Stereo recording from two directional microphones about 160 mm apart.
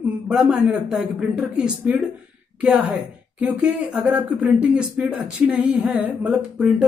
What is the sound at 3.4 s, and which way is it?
Speech, 10° right (ahead or behind).